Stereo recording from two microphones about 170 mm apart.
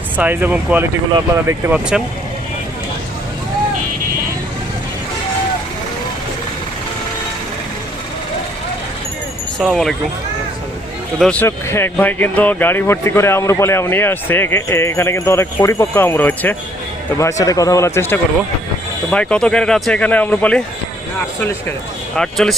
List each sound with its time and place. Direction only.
0.2 s speech: 10° right (ahead or behind)
9.6 s speech: centre (ahead or behind)
11.2 s speech: 10° left (ahead or behind)
22.1 s speech: 5° left (ahead or behind)